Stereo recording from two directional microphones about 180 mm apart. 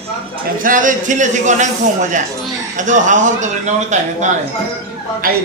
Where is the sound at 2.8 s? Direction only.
45° right (ahead or behind).